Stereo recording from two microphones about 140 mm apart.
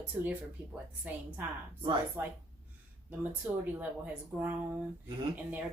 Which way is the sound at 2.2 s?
15° right (ahead or behind).